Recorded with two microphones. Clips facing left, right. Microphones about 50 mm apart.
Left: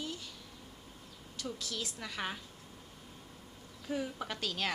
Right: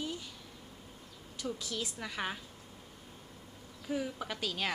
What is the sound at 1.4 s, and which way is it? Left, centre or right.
A woman's voice, centre.